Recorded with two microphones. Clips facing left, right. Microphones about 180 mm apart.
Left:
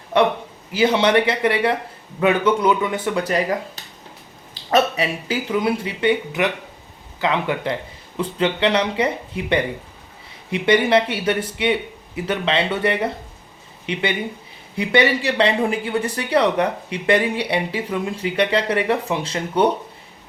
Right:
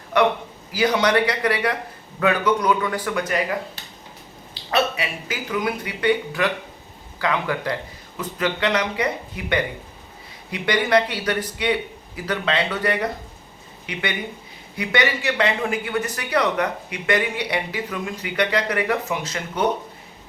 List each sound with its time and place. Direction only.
0.1 s a man's voice: 30° left (ahead or behind)
4.7 s speech: 35° left (ahead or behind)